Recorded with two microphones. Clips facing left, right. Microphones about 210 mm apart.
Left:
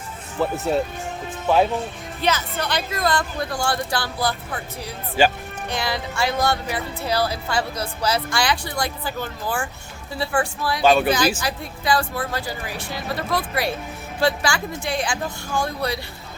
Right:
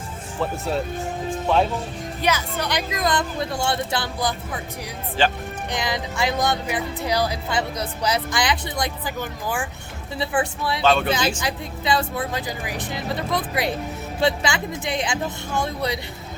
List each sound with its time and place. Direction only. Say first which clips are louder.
0.3 s speech: left 3 dB; centre (ahead or behind)
2.2 s speech: left 1 dB; 10° right (ahead or behind)
5.2 s speech: left 3 dB; 10° left (ahead or behind)
5.6 s speech: left 1 dB; 15° right (ahead or behind)
10.8 s speech: left 3 dB; 10° left (ahead or behind)
11.3 s speech: even; 25° right (ahead or behind)